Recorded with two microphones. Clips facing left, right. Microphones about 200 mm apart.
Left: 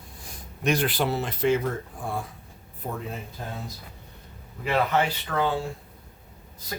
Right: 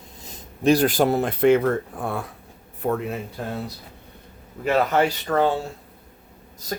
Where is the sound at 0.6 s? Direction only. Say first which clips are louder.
Right 7 dB; 35° right (ahead or behind); by 3.5 s 70° right (ahead or behind).